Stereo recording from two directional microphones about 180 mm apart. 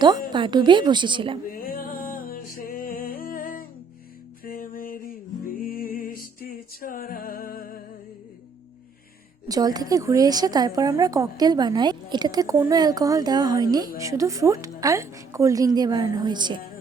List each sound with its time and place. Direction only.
0.0 s a woman's voice: 25° right (ahead or behind)
1.5 s music: 50° left (ahead or behind)
9.5 s a woman's voice: 20° right (ahead or behind)